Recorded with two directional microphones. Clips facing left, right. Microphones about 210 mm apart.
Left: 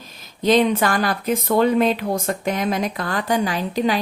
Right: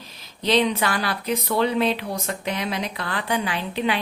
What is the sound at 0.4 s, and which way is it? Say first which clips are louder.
A woman's voice: left 4 dB; 50° left (ahead or behind).